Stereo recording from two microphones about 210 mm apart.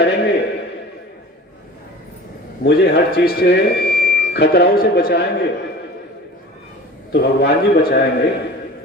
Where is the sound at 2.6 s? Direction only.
50° left (ahead or behind).